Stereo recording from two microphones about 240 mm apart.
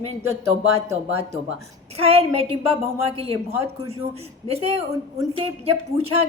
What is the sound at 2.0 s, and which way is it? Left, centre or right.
A man's voice, right.